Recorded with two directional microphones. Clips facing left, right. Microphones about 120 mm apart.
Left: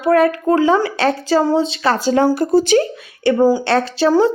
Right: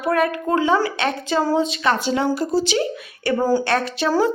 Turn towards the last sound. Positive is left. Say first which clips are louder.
# left 5 dB
turn(degrees=30)  # may be behind; listen again after turning